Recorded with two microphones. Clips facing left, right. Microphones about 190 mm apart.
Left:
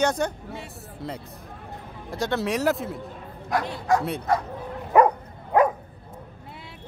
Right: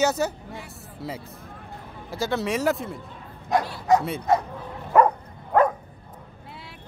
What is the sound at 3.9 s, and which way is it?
Speech, 20° right (ahead or behind).